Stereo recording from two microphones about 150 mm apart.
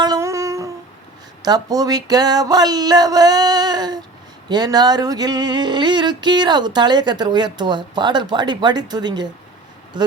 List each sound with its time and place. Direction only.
0.0 s humming: 25° right (ahead or behind)
1.5 s a sound: 25° right (ahead or behind)
10.0 s speech: 30° right (ahead or behind)